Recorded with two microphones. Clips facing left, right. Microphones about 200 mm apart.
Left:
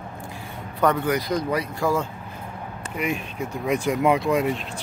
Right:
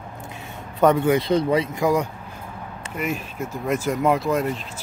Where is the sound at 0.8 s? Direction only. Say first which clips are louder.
Right 4 dB; 25° right (ahead or behind).